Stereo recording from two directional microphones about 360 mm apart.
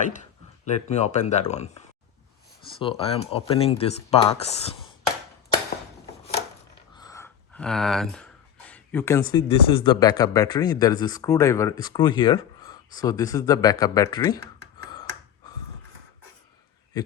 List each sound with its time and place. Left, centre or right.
0.6 s speech: centre
6.9 s speech: centre